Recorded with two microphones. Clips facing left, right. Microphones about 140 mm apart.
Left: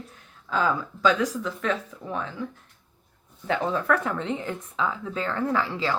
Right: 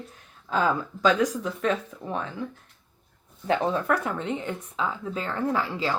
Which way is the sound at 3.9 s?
10° right (ahead or behind).